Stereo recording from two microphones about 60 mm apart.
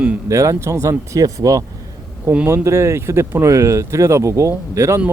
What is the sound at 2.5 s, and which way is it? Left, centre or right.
Speech, right.